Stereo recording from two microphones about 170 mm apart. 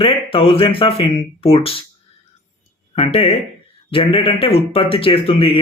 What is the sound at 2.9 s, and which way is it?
Speech, 35° left (ahead or behind).